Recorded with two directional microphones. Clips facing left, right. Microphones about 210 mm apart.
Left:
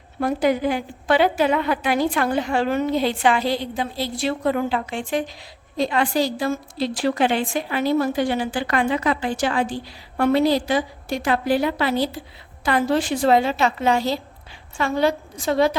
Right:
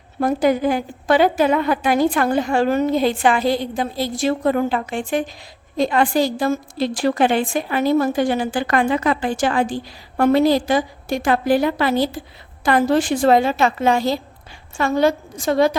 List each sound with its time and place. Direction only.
0.2 s a woman's voice: 45° right (ahead or behind)